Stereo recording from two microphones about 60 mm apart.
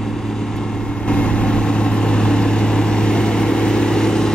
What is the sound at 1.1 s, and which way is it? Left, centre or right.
Vehicle, centre.